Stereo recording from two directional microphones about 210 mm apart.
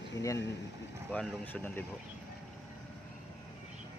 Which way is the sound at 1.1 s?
5° left (ahead or behind).